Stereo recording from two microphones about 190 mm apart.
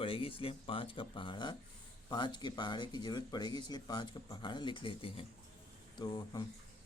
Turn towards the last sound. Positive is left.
turn(degrees=20)  # may be behind; listen again after turning